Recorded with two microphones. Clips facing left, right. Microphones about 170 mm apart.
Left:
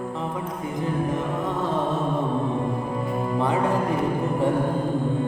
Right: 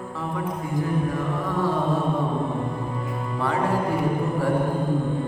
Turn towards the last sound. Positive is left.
turn(degrees=20)  # may be behind; listen again after turning